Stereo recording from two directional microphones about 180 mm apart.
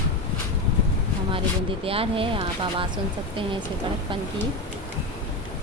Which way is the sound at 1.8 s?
30° right (ahead or behind).